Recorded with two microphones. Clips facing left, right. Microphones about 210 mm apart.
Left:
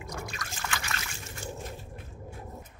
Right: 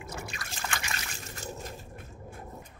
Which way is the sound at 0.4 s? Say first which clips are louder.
Left 1 dB; 25° right (ahead or behind).